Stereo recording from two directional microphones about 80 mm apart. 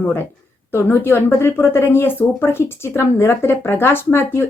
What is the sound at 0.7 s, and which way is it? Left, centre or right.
Speech, left.